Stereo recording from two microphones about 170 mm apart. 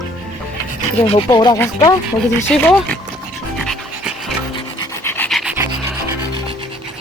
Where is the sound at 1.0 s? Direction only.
30° left (ahead or behind).